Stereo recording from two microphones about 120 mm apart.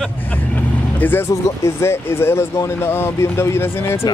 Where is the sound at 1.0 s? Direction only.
20° left (ahead or behind).